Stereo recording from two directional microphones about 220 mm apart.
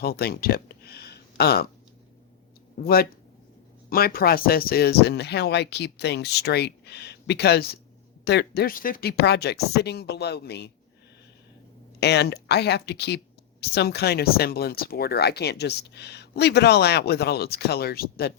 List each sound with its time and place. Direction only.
0.0 s speech: 45° left (ahead or behind)
2.8 s speech: 45° left (ahead or behind)
11.9 s speech: 50° left (ahead or behind)